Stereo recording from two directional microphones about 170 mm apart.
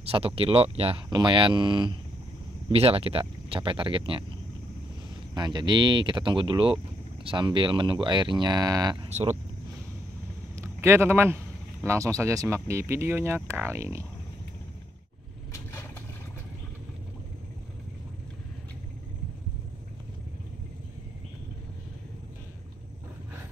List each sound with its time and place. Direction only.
0.0 s speech: 35° right (ahead or behind)
5.3 s speech: 25° right (ahead or behind)
9.1 s speech: 40° right (ahead or behind)
10.5 s a sound: 15° right (ahead or behind)
11.8 s speech: 15° right (ahead or behind)